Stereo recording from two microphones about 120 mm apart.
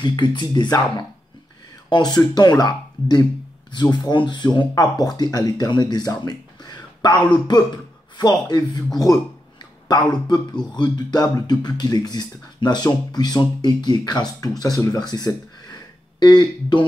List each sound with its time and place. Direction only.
0.0 s speech: 40° left (ahead or behind)